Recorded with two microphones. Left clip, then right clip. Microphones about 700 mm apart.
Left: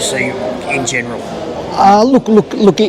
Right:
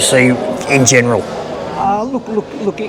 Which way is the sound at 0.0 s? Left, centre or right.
Right.